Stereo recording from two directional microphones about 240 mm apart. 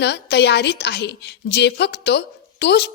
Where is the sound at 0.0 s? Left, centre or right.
Left.